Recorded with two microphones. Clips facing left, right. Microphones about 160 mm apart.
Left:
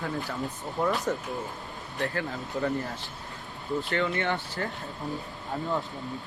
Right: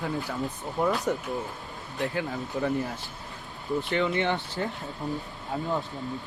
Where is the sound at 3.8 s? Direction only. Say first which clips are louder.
Right 2 dB; 20° right (ahead or behind).